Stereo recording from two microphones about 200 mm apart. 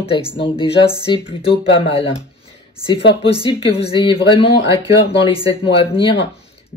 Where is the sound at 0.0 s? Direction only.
25° left (ahead or behind).